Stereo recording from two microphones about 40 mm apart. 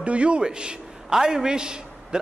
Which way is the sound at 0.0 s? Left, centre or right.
Right.